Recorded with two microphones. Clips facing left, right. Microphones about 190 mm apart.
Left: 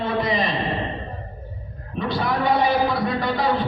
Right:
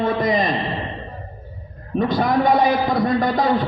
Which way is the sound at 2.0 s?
45° right (ahead or behind).